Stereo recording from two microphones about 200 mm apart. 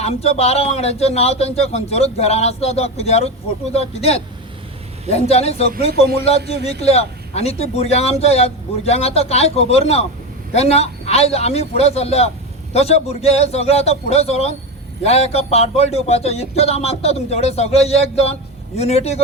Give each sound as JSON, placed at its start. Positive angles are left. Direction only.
{"t": 0.0, "sound": "speech", "side_deg": 30}
{"t": 6.8, "sound": "speech", "side_deg": 30}